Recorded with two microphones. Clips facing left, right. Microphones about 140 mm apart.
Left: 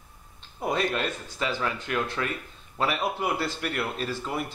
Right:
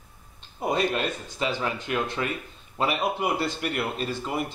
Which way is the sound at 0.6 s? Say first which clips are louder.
Right 2 dB; 10° right (ahead or behind).